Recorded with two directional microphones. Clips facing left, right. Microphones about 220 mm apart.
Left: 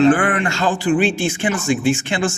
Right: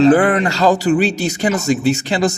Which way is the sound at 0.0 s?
35° right (ahead or behind).